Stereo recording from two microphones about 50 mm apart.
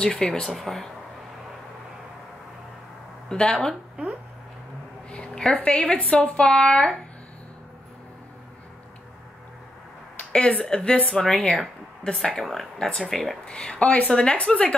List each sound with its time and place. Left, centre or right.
0.0 s speech: centre
3.3 s speech: centre
5.1 s a sound: centre
5.6 s speech: left
10.3 s speech: centre
12.0 s speech: centre
13.5 s speech: centre